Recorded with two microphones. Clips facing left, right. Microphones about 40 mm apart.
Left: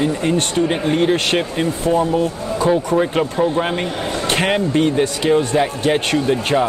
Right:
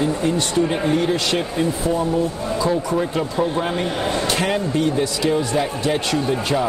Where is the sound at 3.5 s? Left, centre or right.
Left.